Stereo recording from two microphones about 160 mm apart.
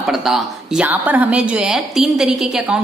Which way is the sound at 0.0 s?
Centre (ahead or behind).